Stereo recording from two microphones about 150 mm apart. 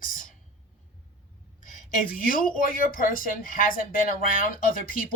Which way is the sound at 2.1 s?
70° left (ahead or behind).